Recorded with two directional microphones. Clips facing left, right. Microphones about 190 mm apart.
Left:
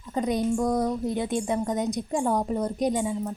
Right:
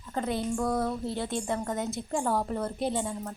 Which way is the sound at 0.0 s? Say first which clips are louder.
Left 5 dB; 15° left (ahead or behind).